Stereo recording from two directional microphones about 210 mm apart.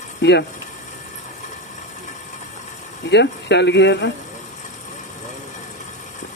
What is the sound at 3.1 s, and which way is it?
Speech, 55° left (ahead or behind).